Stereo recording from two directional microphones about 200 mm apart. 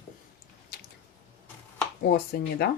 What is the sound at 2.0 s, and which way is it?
Speech, 50° left (ahead or behind).